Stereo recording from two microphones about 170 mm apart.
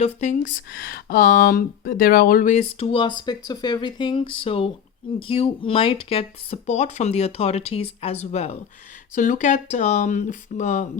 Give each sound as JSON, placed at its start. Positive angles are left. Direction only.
{"t": 0.0, "sound": "speech", "side_deg": 40}
{"t": 0.4, "sound": "speech", "side_deg": 75}
{"t": 2.7, "sound": "speech", "side_deg": 30}